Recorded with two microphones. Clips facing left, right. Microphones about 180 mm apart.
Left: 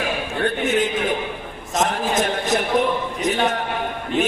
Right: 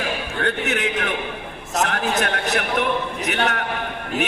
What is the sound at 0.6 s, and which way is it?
A man's voice, 70° right (ahead or behind).